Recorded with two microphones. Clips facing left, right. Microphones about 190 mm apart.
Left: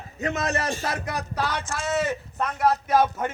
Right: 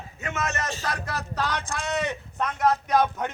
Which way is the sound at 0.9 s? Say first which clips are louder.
Left 2 dB; 15° left (ahead or behind).